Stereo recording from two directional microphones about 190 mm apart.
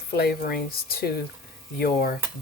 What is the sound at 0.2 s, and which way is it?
Speech, 55° left (ahead or behind).